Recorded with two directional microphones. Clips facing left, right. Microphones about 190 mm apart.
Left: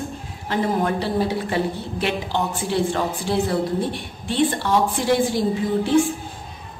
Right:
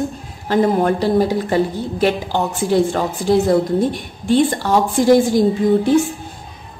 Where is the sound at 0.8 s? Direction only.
45° right (ahead or behind).